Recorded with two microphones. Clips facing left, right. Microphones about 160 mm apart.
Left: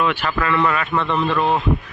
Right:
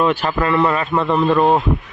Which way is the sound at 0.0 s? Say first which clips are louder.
Right 4 dB; 35° right (ahead or behind).